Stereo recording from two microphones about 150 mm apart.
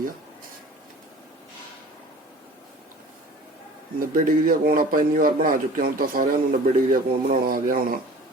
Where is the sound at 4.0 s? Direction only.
60° right (ahead or behind).